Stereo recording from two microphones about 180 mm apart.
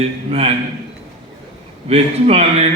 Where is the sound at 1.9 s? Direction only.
35° right (ahead or behind).